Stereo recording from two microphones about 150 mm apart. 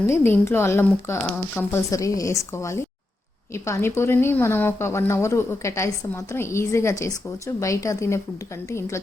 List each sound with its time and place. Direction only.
0.0 s a woman's voice: 15° left (ahead or behind)